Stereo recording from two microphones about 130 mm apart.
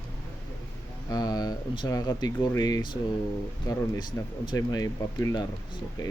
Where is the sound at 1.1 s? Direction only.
30° left (ahead or behind).